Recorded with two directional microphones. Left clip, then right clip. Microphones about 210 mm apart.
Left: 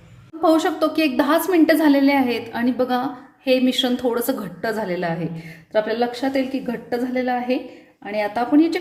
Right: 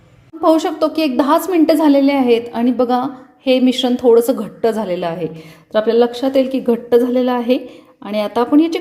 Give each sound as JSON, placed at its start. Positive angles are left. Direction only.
{"t": 0.4, "sound": "a woman's voice", "side_deg": -20}